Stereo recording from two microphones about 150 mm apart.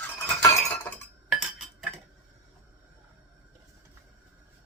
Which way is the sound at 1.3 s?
5° right (ahead or behind).